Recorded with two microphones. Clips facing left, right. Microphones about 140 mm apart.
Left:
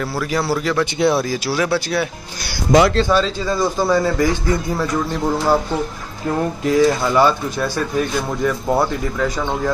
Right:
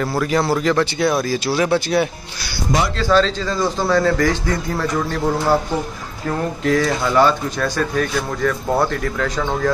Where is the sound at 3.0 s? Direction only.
10° left (ahead or behind).